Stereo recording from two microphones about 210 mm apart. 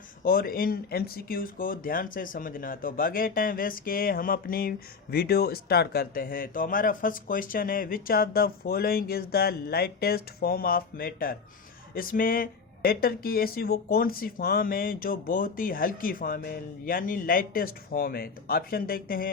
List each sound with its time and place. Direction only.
0.3 s speech: 45° left (ahead or behind)